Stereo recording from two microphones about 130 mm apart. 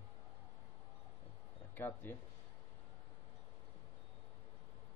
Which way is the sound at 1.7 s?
15° left (ahead or behind).